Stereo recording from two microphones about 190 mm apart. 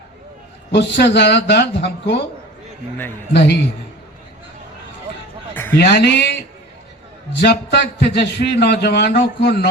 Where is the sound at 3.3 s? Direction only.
60° left (ahead or behind).